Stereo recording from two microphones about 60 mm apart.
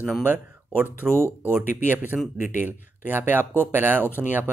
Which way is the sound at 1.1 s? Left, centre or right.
Left.